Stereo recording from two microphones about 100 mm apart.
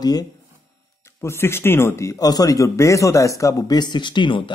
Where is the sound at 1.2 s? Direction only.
25° left (ahead or behind).